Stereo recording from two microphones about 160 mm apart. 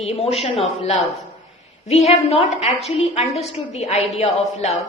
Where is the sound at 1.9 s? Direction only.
40° left (ahead or behind).